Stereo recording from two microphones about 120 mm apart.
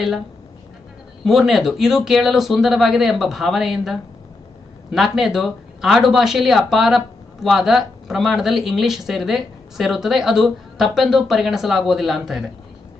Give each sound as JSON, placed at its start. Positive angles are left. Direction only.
{"t": 1.2, "sound": "speech", "side_deg": 0}